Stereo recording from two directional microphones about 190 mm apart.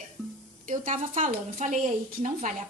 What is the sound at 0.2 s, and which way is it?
Music, centre (ahead or behind).